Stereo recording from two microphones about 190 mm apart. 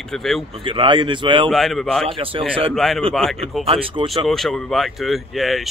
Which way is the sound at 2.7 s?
Centre (ahead or behind).